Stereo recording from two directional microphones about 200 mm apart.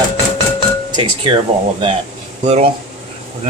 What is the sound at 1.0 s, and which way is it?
Speech, 25° right (ahead or behind).